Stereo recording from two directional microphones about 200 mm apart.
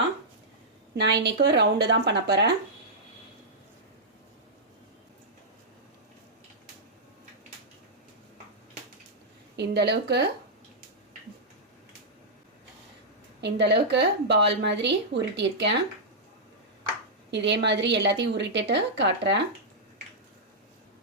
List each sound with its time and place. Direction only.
0.9 s a woman's voice: 60° right (ahead or behind)
9.6 s a woman's voice: 55° right (ahead or behind)
13.4 s a woman's voice: 60° right (ahead or behind)
17.3 s a woman's voice: 60° right (ahead or behind)